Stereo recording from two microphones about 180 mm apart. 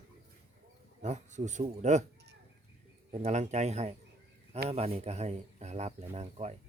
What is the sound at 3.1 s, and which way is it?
Speech, 40° right (ahead or behind).